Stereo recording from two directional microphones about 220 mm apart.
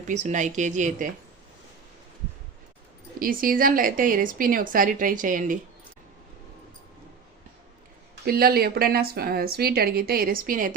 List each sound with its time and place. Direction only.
0.1 s a woman's voice: 35° right (ahead or behind)
3.2 s a woman's voice: 40° right (ahead or behind)
8.2 s a woman's voice: 45° right (ahead or behind)